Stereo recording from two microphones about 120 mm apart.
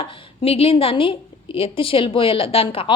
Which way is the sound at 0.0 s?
55° left (ahead or behind).